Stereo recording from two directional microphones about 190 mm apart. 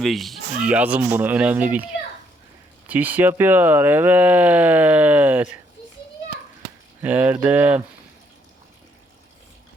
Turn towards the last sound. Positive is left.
turn(degrees=-10)  # may be behind; listen again after turning